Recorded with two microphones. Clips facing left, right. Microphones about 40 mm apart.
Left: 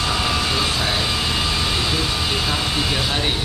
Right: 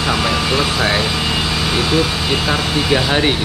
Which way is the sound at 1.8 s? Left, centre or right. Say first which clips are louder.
Right 5 dB; right.